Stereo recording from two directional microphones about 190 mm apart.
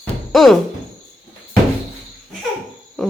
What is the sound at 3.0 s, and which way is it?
Owl, centre (ahead or behind).